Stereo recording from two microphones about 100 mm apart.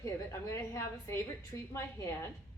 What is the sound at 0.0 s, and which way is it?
A woman's voice, 30° left (ahead or behind).